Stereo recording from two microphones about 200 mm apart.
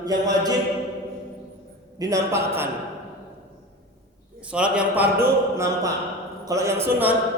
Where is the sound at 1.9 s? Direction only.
15° right (ahead or behind).